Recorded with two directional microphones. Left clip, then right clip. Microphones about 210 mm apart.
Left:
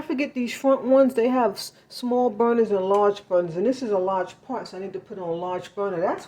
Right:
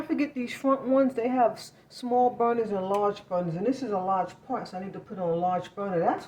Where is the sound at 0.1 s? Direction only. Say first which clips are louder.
Left 4 dB; 40° left (ahead or behind).